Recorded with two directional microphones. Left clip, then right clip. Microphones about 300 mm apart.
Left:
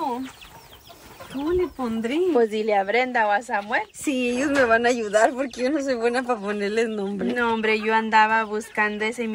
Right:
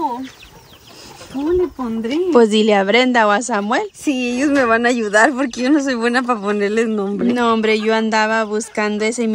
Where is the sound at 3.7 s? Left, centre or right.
Right.